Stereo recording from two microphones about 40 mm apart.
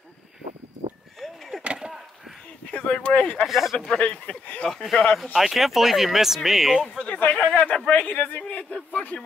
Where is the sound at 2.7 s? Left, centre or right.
Left.